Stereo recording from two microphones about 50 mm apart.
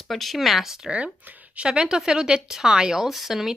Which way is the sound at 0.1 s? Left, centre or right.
Centre.